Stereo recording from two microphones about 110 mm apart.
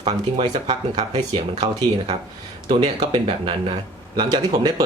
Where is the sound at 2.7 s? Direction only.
45° right (ahead or behind).